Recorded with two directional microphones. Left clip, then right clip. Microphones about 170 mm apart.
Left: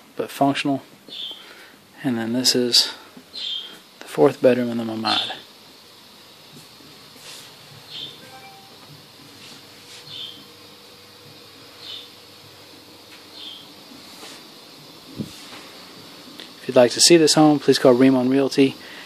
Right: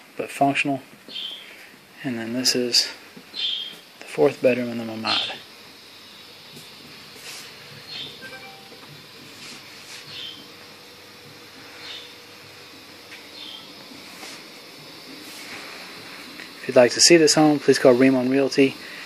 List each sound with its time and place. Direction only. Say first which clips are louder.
0.2 s speech: even; 35° left (ahead or behind)
2.0 s speech: left 3 dB; 40° left (ahead or behind)
4.0 s speech: left 3 dB; 40° left (ahead or behind)
16.6 s speech: even; 30° left (ahead or behind)